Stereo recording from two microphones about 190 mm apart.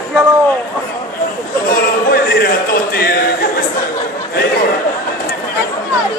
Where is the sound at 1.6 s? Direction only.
55° left (ahead or behind).